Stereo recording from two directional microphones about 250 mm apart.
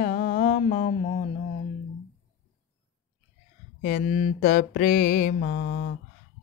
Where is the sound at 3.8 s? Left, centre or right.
Left.